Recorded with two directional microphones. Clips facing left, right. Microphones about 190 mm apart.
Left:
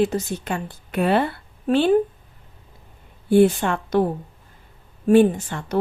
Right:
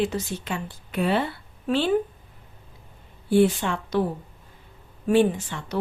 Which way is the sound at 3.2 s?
50° left (ahead or behind).